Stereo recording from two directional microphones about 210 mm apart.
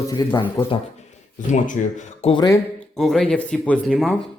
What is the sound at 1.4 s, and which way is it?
Speech, 35° left (ahead or behind).